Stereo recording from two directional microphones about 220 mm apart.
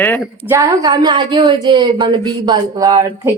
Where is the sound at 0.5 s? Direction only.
20° right (ahead or behind).